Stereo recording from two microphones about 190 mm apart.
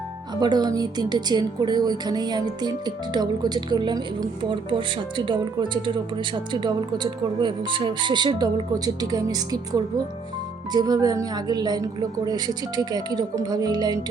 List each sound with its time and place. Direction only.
0.3 s speech: 20° right (ahead or behind)